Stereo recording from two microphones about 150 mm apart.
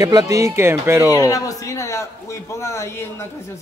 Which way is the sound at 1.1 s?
25° left (ahead or behind).